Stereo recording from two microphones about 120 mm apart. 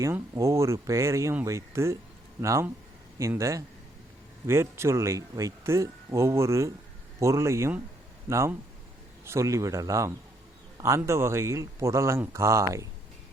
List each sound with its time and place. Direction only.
0.0 s speech: 25° right (ahead or behind)